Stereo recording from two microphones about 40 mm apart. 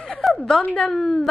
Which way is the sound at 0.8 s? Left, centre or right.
Centre.